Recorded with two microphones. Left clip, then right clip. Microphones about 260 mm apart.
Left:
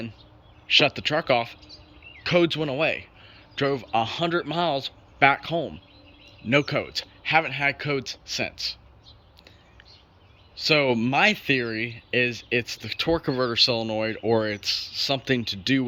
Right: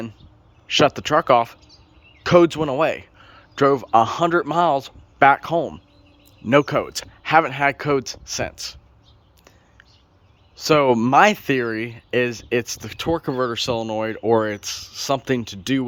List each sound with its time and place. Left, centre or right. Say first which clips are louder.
0.7 s speech: right 3 dB; centre
1.6 s a sound: left 4 dB; right
2.2 s speech: right 7 dB; centre
10.5 s speech: right 5 dB; centre